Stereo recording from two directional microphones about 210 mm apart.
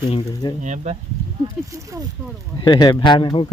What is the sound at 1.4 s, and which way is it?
Speech, 15° right (ahead or behind).